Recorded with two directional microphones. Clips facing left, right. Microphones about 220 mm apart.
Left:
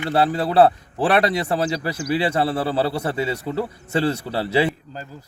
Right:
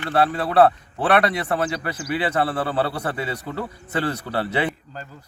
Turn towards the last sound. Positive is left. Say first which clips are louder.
# left 3 dB
turn(degrees=30)  # may be behind; listen again after turning